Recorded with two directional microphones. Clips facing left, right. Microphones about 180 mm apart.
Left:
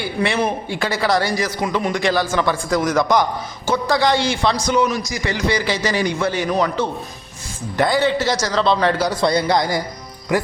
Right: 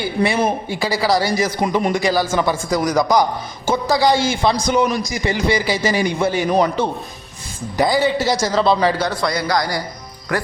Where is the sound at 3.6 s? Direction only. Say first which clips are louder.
Right 2 dB; 10° right (ahead or behind).